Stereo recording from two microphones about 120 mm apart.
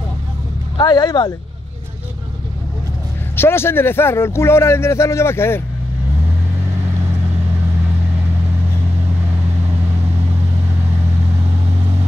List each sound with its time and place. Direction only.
0.7 s speech: 35° left (ahead or behind)
3.3 s speech: 20° left (ahead or behind)